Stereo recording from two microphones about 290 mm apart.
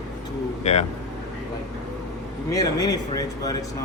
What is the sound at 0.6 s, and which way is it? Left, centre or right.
Speech, left.